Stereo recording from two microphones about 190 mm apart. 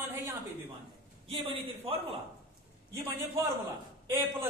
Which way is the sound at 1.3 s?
30° right (ahead or behind).